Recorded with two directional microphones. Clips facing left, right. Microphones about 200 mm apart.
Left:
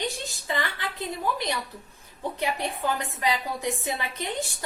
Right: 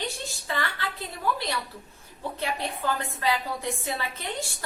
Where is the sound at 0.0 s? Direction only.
15° left (ahead or behind).